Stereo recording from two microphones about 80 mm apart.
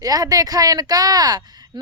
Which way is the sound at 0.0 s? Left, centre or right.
Right.